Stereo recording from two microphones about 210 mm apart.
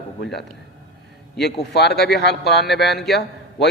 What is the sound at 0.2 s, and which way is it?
A man's voice, 50° left (ahead or behind).